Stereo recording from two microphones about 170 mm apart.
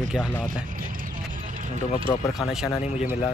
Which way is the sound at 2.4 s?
Centre (ahead or behind).